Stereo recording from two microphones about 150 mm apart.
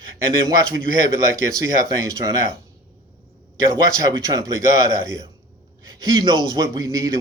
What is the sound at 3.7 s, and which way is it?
A man's voice, 25° right (ahead or behind).